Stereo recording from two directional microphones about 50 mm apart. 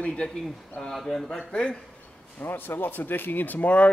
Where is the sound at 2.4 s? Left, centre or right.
Left.